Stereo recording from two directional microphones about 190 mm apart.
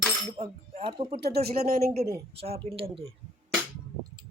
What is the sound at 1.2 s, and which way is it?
Speech, 55° right (ahead or behind).